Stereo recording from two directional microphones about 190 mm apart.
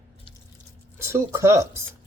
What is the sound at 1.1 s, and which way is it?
Speech, 15° right (ahead or behind).